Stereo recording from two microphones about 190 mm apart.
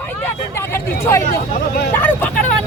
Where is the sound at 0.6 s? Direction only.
15° left (ahead or behind).